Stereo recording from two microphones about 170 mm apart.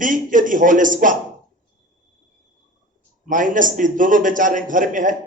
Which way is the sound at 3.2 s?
50° right (ahead or behind).